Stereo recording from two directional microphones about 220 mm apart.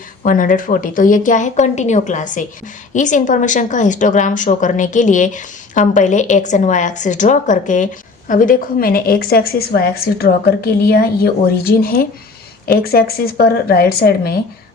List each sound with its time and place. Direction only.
0.2 s a woman's voice: 40° left (ahead or behind)